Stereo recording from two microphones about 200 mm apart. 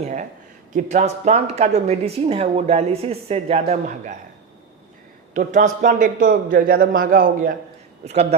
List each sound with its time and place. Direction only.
0.0 s speech: 40° right (ahead or behind)
5.3 s a man's voice: 40° right (ahead or behind)
8.0 s speech: 30° right (ahead or behind)